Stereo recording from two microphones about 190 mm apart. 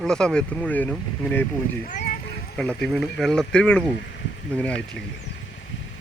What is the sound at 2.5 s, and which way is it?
Speech, 5° left (ahead or behind).